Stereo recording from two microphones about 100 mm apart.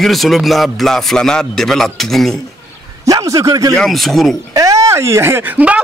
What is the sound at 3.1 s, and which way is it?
Speech, 35° right (ahead or behind).